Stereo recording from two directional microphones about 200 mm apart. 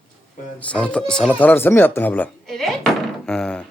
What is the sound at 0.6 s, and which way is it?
Speech, 5° left (ahead or behind).